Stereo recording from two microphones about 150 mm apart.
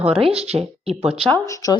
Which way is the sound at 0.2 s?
40° right (ahead or behind).